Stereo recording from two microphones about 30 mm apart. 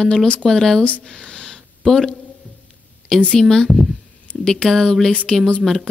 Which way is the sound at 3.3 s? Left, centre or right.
Centre.